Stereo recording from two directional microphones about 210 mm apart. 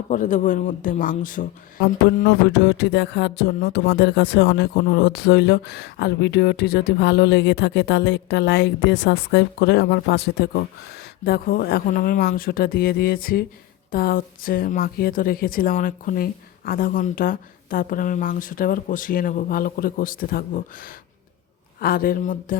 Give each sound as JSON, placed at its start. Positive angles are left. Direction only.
{"t": 0.1, "sound": "a woman's voice", "side_deg": 40}